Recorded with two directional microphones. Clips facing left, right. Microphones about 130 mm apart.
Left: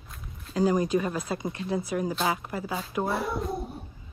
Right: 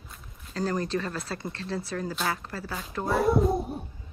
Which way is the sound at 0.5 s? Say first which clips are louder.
Left 5 dB; 10° left (ahead or behind).